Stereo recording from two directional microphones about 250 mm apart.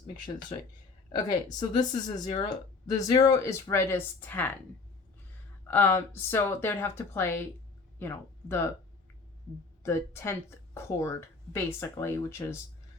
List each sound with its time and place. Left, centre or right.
1.1 s speech: centre
5.7 s speech: centre
9.8 s speech: centre